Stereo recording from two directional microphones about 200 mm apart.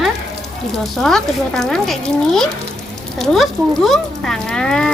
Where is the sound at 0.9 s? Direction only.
Centre (ahead or behind).